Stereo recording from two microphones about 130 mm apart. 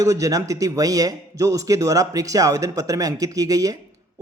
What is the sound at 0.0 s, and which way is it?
Speech, 25° right (ahead or behind).